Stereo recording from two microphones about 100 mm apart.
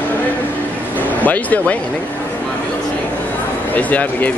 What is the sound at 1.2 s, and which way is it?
Speech, 15° left (ahead or behind).